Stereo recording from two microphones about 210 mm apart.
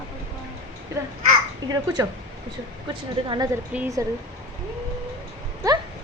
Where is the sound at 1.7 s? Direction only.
15° right (ahead or behind).